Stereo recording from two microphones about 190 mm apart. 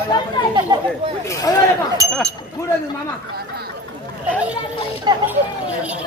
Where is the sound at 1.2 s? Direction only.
20° left (ahead or behind).